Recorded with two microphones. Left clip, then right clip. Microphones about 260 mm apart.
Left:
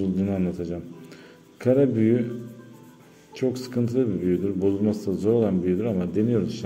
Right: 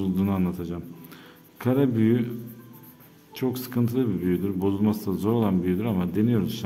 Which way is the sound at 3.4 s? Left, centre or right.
Centre.